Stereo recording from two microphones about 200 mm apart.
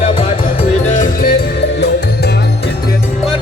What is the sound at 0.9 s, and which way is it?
Music, 45° left (ahead or behind).